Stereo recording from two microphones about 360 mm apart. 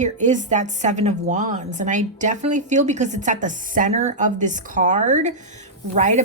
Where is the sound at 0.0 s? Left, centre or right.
Centre.